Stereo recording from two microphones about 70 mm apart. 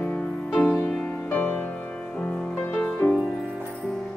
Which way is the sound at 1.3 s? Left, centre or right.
Left.